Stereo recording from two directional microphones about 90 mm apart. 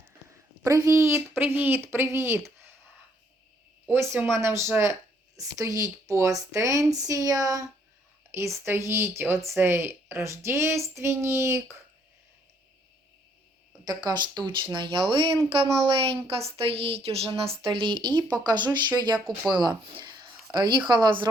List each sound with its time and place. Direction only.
0.9 s a woman's voice: 35° right (ahead or behind)
1.4 s speech: 20° right (ahead or behind)
3.8 s a woman's voice: 30° right (ahead or behind)
13.8 s speech: 50° right (ahead or behind)
15.1 s speech: 75° right (ahead or behind)
16.0 s speech: 90° right
17.7 s speech: 65° right (ahead or behind)